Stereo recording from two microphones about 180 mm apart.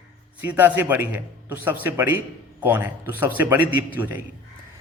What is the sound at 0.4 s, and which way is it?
A man's voice, 10° right (ahead or behind).